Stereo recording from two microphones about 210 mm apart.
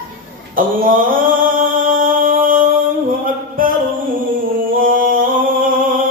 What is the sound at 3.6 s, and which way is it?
Music, 40° right (ahead or behind).